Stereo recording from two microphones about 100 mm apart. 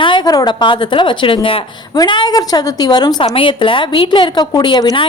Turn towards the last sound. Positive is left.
turn(degrees=45)  # may be behind; listen again after turning